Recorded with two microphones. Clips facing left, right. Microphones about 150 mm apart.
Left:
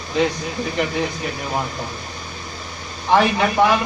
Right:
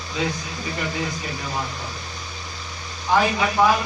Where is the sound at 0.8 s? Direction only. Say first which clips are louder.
Left 7 dB; 65° left (ahead or behind).